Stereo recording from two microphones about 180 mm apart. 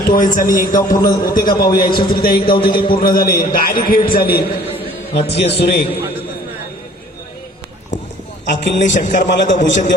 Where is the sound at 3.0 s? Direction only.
55° left (ahead or behind).